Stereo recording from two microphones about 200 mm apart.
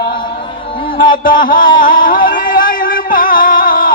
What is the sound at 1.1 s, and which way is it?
Music, 45° left (ahead or behind).